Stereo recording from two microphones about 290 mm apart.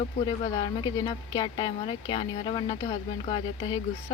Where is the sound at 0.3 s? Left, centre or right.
Centre.